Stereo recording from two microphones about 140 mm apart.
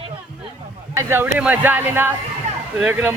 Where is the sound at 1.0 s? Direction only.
15° right (ahead or behind).